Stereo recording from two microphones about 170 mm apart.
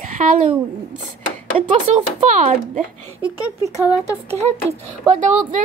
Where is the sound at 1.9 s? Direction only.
40° right (ahead or behind).